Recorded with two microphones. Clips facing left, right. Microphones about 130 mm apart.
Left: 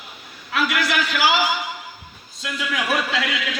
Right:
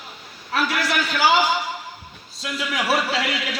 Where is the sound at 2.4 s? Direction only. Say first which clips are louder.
Right 1 dB; 30° right (ahead or behind).